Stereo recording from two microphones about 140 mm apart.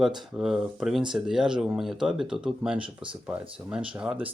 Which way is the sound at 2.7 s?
35° right (ahead or behind).